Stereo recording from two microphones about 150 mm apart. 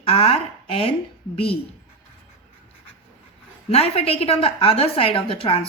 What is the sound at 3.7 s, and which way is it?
A woman's voice, 40° left (ahead or behind).